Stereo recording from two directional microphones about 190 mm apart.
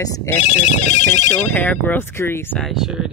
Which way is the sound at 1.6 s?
10° left (ahead or behind).